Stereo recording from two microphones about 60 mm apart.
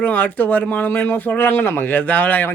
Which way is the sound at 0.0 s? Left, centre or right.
Left.